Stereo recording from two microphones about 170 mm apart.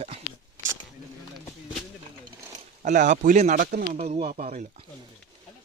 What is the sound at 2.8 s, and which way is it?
Speech, 50° right (ahead or behind).